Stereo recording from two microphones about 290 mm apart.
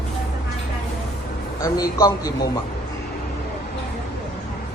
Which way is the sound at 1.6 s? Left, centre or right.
Centre.